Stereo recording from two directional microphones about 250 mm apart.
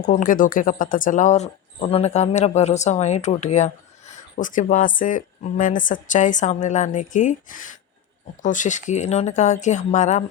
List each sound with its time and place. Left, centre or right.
0.0 s speech: left